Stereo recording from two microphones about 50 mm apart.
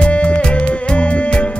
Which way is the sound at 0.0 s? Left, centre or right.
Left.